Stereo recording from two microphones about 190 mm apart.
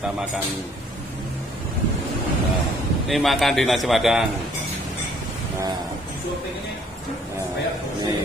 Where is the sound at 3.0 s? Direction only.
Centre (ahead or behind).